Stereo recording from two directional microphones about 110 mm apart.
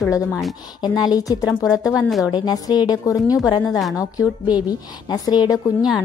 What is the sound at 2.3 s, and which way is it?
A woman's voice, 35° left (ahead or behind).